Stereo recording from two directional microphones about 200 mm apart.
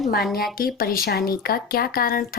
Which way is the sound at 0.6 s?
45° left (ahead or behind).